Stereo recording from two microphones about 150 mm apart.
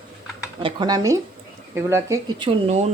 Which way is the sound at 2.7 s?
45° right (ahead or behind).